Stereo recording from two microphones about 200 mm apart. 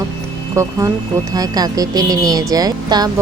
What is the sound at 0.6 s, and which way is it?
Speech, 15° right (ahead or behind).